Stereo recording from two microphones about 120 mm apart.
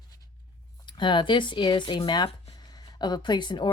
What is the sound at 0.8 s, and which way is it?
Speech, 40° left (ahead or behind).